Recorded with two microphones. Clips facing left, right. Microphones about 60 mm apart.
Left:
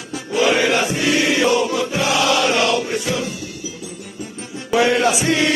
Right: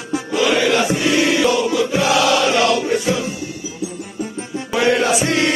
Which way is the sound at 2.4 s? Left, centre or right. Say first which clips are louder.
Right 2 dB; left.